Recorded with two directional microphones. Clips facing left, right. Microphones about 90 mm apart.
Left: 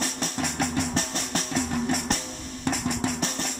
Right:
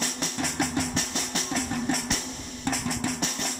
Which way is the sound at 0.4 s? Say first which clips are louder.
Left 1 dB; centre (ahead or behind).